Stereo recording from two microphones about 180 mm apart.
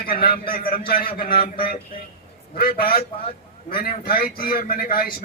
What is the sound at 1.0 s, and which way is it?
Speech, 30° left (ahead or behind).